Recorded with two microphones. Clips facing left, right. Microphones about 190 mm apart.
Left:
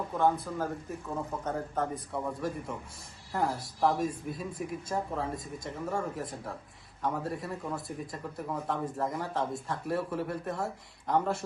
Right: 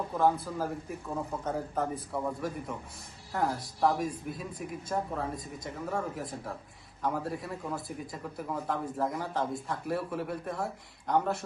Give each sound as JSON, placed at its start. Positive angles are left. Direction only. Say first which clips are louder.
{"t": 0.2, "sound": "speech", "louder": "even", "side_deg": -5}